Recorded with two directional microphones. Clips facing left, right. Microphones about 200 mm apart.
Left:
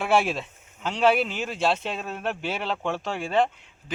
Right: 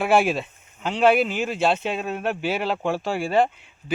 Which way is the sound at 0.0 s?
5° right (ahead or behind).